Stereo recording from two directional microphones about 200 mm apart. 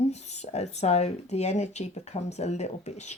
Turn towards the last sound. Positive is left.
turn(degrees=35)  # may be behind; listen again after turning